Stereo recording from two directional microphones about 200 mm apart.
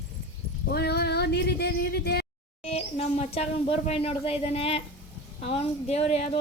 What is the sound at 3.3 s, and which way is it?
A woman's voice, 30° left (ahead or behind).